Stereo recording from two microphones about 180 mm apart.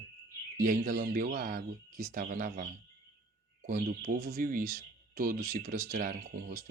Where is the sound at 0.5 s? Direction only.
50° right (ahead or behind).